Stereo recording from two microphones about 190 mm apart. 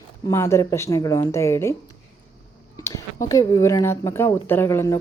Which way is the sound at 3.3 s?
15° left (ahead or behind).